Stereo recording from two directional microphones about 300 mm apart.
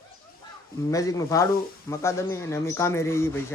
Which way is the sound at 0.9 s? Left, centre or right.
Centre.